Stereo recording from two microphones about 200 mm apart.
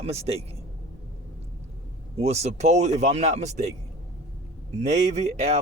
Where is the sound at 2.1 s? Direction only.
30° right (ahead or behind).